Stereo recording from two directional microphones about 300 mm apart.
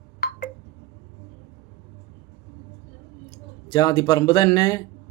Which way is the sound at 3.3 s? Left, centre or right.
Centre.